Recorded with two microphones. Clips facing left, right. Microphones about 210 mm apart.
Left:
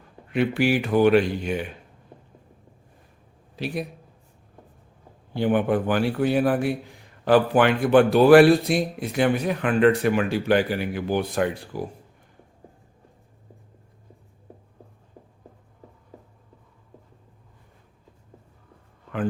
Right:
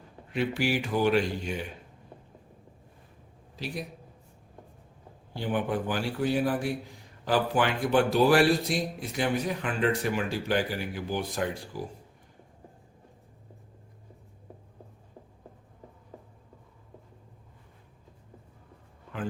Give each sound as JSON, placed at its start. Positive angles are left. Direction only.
{"t": 0.3, "sound": "speech", "side_deg": 60}
{"t": 3.5, "sound": "a man's voice", "side_deg": 60}
{"t": 5.3, "sound": "speech", "side_deg": 60}